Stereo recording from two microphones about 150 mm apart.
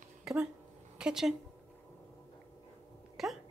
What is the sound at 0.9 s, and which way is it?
Speech, 5° right (ahead or behind).